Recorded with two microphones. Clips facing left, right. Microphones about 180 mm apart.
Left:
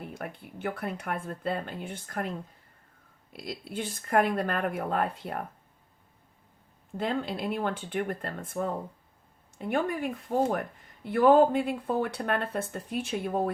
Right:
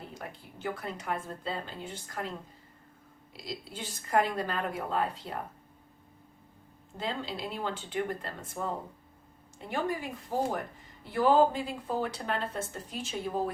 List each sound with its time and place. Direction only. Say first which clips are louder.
0.0 s speech: left 4 dB; 60° left (ahead or behind)
3.3 s speech: left 5 dB; 55° left (ahead or behind)
6.9 s speech: left 5 dB; 55° left (ahead or behind)